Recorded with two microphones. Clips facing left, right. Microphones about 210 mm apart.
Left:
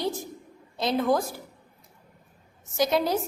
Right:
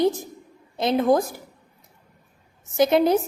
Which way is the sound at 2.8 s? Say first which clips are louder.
Right 6 dB; 20° right (ahead or behind).